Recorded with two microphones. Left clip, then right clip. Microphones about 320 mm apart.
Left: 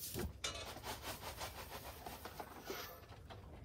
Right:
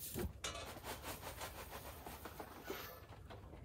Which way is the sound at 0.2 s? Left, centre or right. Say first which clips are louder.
Right 1 dB; left.